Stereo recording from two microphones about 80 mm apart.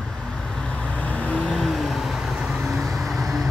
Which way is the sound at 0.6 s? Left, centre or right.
Centre.